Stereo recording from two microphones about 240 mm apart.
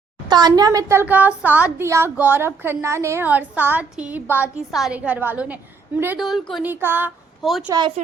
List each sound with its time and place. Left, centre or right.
0.3 s a woman's voice: centre
7.7 s speech: centre